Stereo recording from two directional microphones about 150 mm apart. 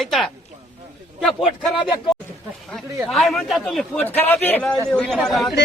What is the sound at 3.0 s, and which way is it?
A man's voice, centre (ahead or behind).